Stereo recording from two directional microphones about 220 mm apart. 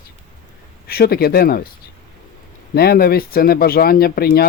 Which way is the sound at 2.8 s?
45° left (ahead or behind).